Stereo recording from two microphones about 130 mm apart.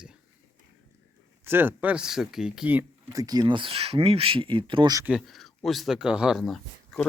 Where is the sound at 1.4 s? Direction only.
15° right (ahead or behind).